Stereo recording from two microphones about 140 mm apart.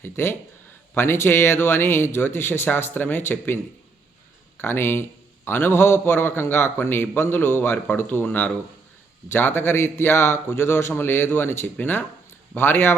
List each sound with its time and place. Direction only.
0.0 s a man's voice: 15° left (ahead or behind)